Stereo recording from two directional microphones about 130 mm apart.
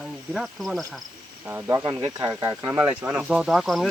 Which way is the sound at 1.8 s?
35° right (ahead or behind).